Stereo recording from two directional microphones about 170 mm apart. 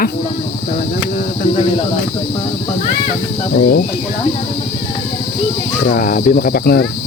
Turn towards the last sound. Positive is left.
turn(degrees=65)  # may be behind; listen again after turning